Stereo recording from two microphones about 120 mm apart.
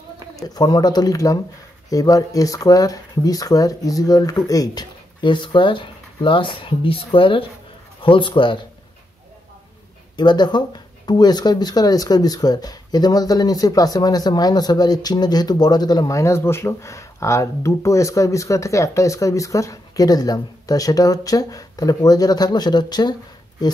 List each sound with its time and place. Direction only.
0.4 s speech: 35° left (ahead or behind)
10.1 s speech: 35° left (ahead or behind)